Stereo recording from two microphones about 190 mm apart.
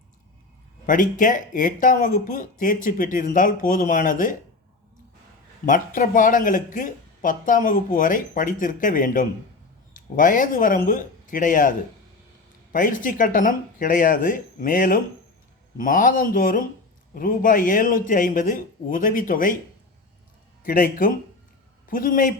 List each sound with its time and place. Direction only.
0.9 s speech: 45° left (ahead or behind)
5.6 s speech: 45° left (ahead or behind)
12.7 s speech: 45° left (ahead or behind)
20.7 s a man's voice: 50° left (ahead or behind)